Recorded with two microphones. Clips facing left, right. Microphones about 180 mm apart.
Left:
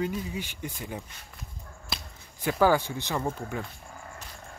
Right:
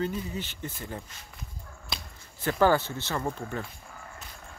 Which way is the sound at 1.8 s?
5° left (ahead or behind).